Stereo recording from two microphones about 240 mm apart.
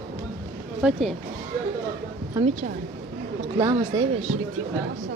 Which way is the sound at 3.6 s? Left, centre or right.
Centre.